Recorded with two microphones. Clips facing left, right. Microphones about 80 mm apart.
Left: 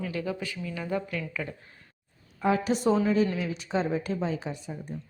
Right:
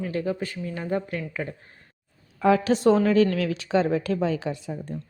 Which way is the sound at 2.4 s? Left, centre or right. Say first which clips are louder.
Right 6 dB; right.